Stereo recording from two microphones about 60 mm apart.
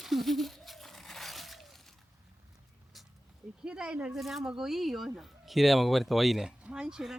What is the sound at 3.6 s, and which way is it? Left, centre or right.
Speech, centre.